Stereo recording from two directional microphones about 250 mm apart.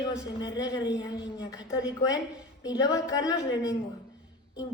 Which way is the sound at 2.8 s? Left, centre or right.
Centre.